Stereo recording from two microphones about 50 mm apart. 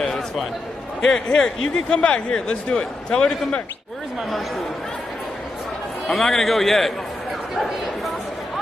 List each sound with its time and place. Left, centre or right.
0.0 s a sound: centre
1.0 s speech: centre
6.0 s a man's voice: centre